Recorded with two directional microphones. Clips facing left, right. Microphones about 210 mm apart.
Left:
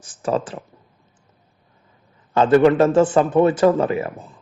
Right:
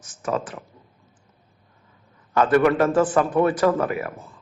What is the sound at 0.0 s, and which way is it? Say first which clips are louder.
Speech: left 4 dB; 30° left (ahead or behind).